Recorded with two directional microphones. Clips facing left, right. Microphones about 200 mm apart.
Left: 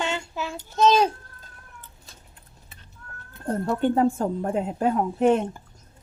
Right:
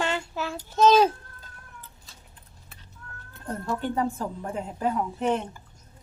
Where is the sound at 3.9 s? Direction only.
40° left (ahead or behind).